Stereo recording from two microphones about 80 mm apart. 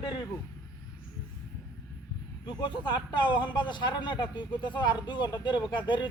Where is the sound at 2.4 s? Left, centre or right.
Left.